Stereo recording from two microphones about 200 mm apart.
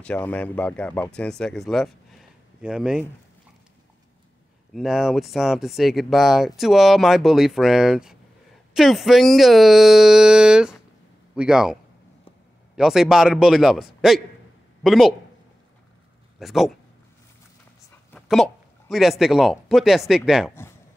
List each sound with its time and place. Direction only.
0.0 s speech: 5° left (ahead or behind)
4.7 s a man's voice: centre (ahead or behind)
16.3 s speech: centre (ahead or behind)
18.1 s a man's voice: centre (ahead or behind)